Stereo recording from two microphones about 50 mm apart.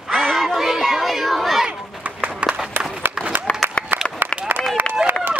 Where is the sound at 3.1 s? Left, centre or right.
Right.